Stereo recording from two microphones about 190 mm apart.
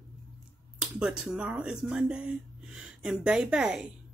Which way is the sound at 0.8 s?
5° right (ahead or behind).